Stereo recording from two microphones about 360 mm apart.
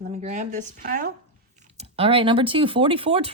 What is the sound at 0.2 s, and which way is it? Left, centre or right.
Speech, centre.